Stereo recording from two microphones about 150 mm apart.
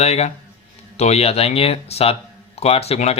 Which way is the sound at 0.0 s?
45° left (ahead or behind).